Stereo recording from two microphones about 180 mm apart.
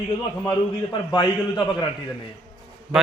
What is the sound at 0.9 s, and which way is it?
Speech, 25° left (ahead or behind).